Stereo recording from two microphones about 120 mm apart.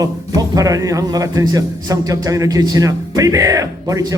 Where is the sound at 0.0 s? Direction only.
30° right (ahead or behind).